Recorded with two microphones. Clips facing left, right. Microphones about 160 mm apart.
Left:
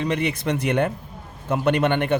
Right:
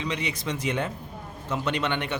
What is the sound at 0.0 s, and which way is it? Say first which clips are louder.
Speech: left 7 dB; 55° left (ahead or behind).